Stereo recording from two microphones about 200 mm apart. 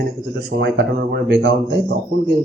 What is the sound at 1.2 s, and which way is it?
Speech, 60° right (ahead or behind).